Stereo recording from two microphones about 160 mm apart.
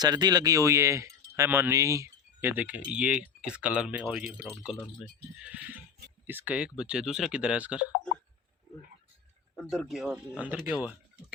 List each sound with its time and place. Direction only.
0.0 s speech: 25° right (ahead or behind); by 4.4 s 5° right (ahead or behind)
5.4 s speech: 10° right (ahead or behind)
9.6 s speech: centre (ahead or behind)